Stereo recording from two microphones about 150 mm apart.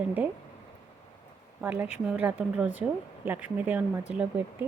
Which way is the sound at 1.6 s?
15° right (ahead or behind).